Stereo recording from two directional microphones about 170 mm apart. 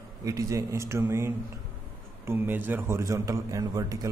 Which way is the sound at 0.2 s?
20° right (ahead or behind).